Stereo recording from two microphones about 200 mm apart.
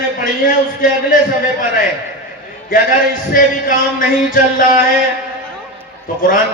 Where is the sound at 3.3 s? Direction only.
45° left (ahead or behind).